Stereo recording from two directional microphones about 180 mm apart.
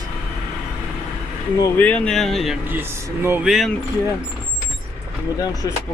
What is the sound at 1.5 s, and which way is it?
Speech, 15° left (ahead or behind).